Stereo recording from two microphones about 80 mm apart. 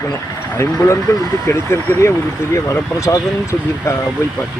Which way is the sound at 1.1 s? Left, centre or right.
Left.